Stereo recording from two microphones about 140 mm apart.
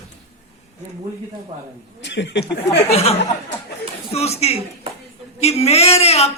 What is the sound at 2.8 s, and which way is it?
Speech, 45° left (ahead or behind).